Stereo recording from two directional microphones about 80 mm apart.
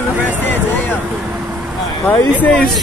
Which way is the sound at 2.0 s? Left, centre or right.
Centre.